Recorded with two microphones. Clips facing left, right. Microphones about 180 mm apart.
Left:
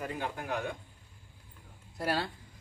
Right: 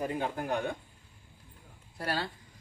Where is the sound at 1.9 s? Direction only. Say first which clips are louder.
Left 2 dB; centre (ahead or behind).